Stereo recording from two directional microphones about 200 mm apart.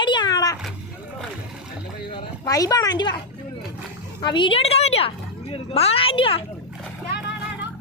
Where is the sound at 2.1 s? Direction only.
20° left (ahead or behind).